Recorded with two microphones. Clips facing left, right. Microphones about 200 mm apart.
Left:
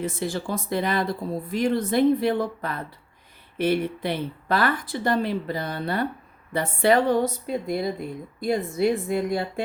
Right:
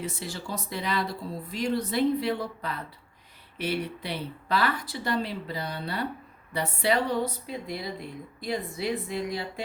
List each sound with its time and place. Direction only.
0.0 s speech: 50° left (ahead or behind)